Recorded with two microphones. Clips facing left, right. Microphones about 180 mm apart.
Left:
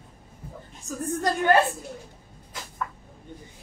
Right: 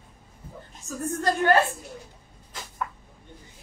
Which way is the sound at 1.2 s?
15° left (ahead or behind).